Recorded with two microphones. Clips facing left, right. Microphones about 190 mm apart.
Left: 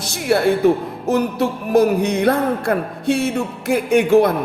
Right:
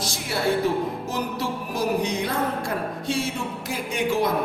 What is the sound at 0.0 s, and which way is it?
A woman's voice, 60° left (ahead or behind).